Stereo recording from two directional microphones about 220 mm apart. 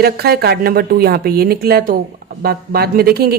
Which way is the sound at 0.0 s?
45° right (ahead or behind).